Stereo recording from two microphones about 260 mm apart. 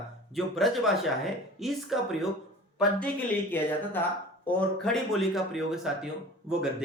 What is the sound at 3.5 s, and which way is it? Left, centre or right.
Speech, centre.